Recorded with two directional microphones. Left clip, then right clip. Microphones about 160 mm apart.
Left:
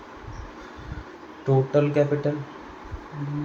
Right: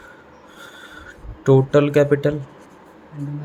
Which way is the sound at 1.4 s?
75° right (ahead or behind).